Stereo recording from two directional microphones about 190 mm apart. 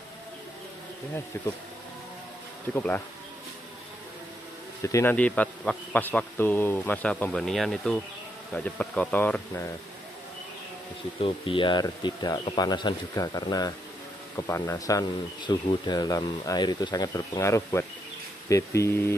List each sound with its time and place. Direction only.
1.3 s speech: 10° left (ahead or behind)
2.7 s speech: 10° left (ahead or behind)
4.8 s speech: 15° left (ahead or behind)
11.1 s speech: 30° left (ahead or behind); by 19.1 s 10° left (ahead or behind)